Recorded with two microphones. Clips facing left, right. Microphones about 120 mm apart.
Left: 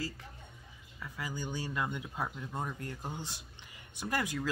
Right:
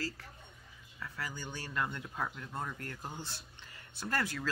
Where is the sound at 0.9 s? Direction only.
15° left (ahead or behind).